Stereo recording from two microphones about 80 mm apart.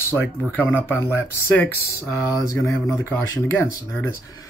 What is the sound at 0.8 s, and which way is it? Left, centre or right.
Speech, left.